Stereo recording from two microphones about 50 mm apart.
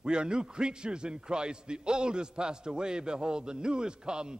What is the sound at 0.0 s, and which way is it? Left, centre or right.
A man's voice, centre.